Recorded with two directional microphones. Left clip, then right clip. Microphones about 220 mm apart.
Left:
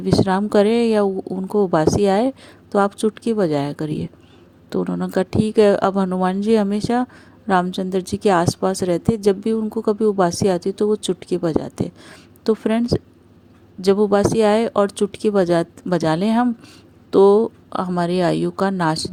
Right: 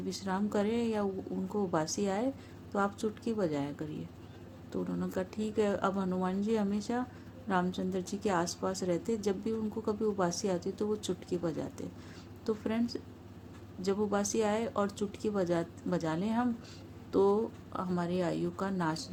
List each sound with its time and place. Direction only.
0.0 s a woman's voice: 40° left (ahead or behind)